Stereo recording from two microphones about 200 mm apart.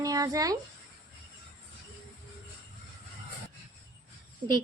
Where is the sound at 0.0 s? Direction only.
20° right (ahead or behind).